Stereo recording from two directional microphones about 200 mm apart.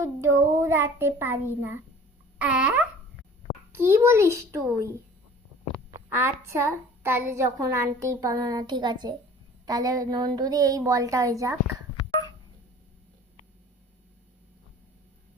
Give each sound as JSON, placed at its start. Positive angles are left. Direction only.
{"t": 0.0, "sound": "a child's voice", "side_deg": -15}
{"t": 6.1, "sound": "a child's voice", "side_deg": -10}